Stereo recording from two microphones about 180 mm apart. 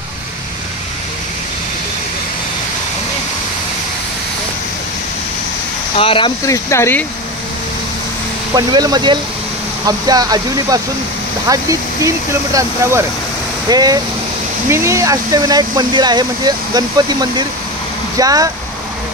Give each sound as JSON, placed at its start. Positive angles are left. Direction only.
{"t": 5.9, "sound": "speech", "side_deg": 30}
{"t": 6.4, "sound": "speech", "side_deg": 15}
{"t": 8.5, "sound": "speech", "side_deg": -20}